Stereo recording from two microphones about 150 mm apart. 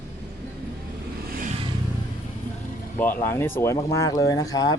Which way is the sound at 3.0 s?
15° left (ahead or behind).